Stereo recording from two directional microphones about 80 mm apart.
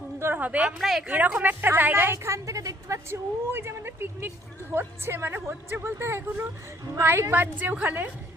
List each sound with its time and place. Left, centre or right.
0.2 s a sound: right
0.8 s speech: centre
1.1 s a woman's voice: centre
2.1 s a woman's voice: right
3.5 s a woman's voice: right